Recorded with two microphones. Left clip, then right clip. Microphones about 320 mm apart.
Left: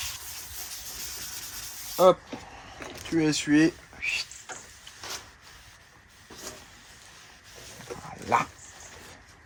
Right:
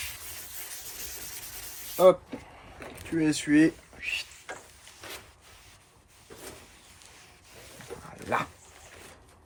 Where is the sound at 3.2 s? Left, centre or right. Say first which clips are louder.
Left 1 dB; centre.